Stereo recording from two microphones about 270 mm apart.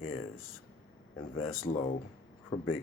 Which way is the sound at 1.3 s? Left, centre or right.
Left.